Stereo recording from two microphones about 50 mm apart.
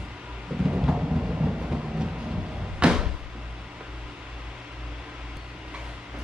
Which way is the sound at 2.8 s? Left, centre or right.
Centre.